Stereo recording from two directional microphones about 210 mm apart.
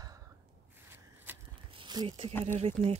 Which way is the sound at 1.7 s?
20° right (ahead or behind).